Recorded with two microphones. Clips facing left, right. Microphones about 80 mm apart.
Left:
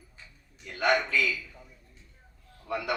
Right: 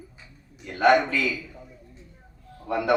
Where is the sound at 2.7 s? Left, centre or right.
Right.